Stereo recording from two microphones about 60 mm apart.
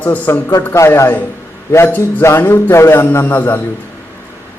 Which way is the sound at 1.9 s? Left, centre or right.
Left.